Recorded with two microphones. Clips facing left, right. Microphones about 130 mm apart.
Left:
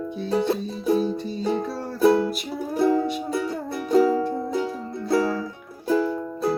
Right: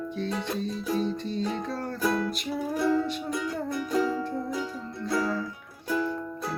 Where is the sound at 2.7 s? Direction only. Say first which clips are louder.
Left 5 dB; 35° left (ahead or behind).